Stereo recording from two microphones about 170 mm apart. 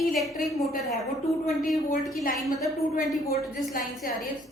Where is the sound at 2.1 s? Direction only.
60° left (ahead or behind).